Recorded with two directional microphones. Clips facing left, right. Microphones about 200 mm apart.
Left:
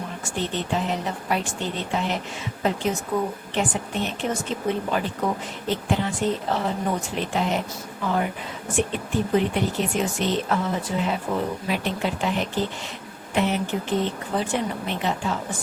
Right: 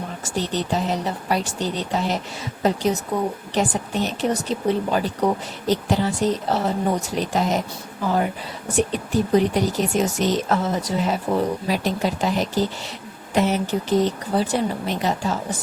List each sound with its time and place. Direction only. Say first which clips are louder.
0.3 s speech: right 3 dB; 40° right (ahead or behind)
8.7 s speech: right 3 dB; 40° right (ahead or behind)